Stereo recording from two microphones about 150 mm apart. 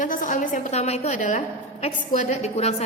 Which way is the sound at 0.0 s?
60° left (ahead or behind).